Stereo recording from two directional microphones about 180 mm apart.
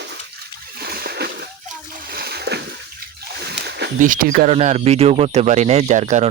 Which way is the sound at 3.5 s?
65° right (ahead or behind).